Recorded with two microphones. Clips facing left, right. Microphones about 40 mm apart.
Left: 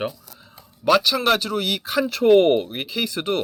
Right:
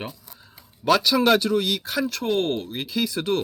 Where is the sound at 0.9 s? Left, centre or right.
Centre.